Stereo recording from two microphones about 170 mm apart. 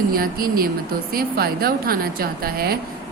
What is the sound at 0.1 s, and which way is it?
Speech, 60° right (ahead or behind).